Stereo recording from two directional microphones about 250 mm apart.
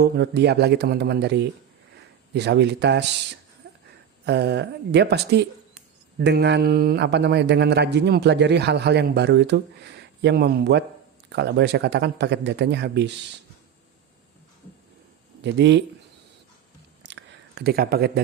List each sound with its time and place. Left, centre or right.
0.0 s speech: right
4.3 s speech: right
15.4 s speech: right
17.0 s a sound: right